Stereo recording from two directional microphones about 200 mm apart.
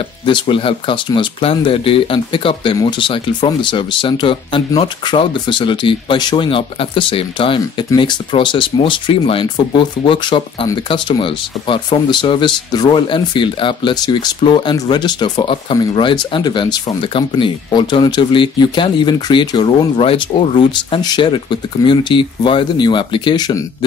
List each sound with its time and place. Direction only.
0.2 s speech: 25° left (ahead or behind)